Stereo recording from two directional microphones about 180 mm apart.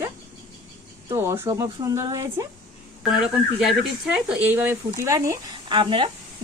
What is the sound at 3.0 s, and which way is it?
Speech, 5° right (ahead or behind).